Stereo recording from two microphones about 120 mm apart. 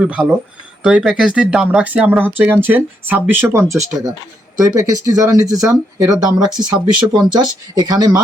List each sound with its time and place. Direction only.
0.0 s speech: 10° right (ahead or behind); by 6.7 s 35° right (ahead or behind)
6.9 s speech: centre (ahead or behind)
7.3 s speech: 35° right (ahead or behind)